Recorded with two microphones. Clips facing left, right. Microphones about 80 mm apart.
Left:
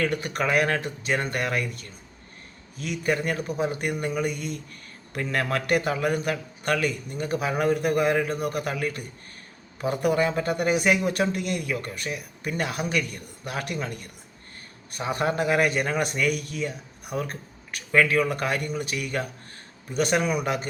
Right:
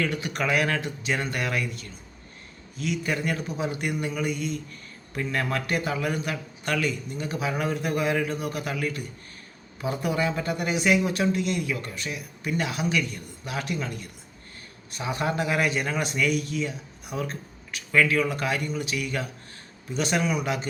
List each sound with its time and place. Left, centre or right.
0.0 s speech: left
5.1 s a man's voice: left
5.9 s speech: left